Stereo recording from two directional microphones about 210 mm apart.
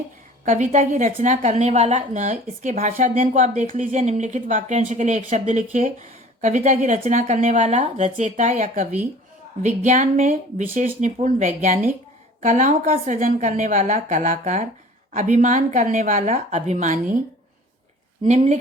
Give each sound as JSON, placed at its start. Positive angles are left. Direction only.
{"t": 0.4, "sound": "a woman's voice", "side_deg": -35}
{"t": 18.3, "sound": "a woman's voice", "side_deg": -30}